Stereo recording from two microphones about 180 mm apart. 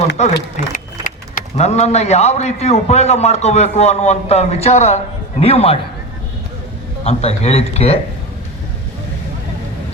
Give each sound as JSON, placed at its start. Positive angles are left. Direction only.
{"t": 0.7, "sound": "speech", "side_deg": 45}
{"t": 7.0, "sound": "speech", "side_deg": 35}